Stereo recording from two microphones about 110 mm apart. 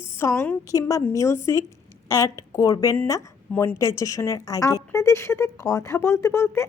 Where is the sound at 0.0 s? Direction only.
25° left (ahead or behind).